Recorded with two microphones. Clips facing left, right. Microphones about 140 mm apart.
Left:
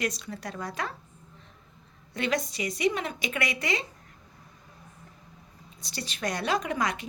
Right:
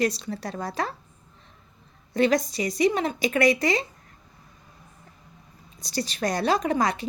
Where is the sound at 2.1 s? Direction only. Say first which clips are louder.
Right 8 dB; 35° right (ahead or behind).